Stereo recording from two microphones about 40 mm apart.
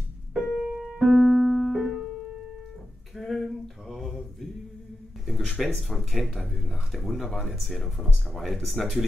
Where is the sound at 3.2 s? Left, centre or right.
Centre.